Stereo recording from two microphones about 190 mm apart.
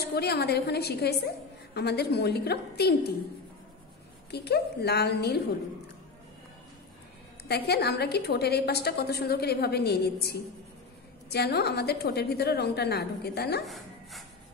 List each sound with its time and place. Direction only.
0.0 s a woman's voice: 60° left (ahead or behind)
4.3 s a woman's voice: 60° left (ahead or behind)
7.4 s a woman's voice: 60° left (ahead or behind)